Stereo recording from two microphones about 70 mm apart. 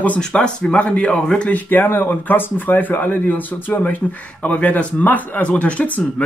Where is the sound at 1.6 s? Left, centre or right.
Left.